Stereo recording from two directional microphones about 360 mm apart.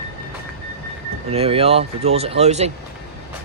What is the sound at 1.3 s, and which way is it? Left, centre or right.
Speech, centre.